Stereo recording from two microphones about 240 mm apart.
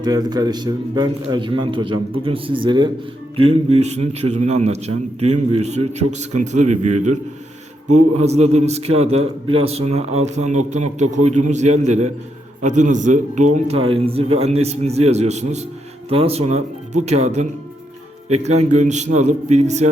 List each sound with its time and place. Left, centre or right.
0.0 s a man's voice: centre
7.9 s a man's voice: right
18.4 s a man's voice: right